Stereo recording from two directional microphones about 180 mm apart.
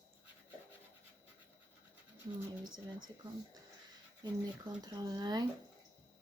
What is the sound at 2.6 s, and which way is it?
Speech, 25° right (ahead or behind).